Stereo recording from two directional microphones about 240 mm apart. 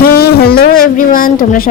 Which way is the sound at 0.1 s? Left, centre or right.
Left.